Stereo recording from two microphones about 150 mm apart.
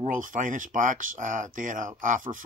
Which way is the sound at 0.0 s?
60° right (ahead or behind).